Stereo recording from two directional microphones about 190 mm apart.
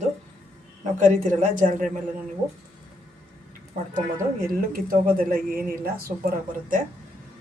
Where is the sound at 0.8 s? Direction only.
40° right (ahead or behind).